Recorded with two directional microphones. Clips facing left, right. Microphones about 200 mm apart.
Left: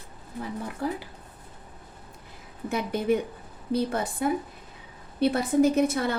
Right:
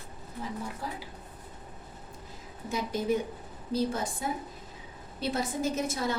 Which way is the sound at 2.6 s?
60° left (ahead or behind).